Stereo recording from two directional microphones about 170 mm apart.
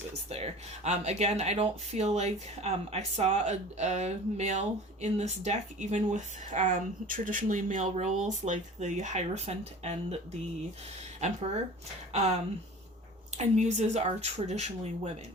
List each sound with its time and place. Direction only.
0.3 s speech: 40° right (ahead or behind)
12.1 s speech: 40° right (ahead or behind)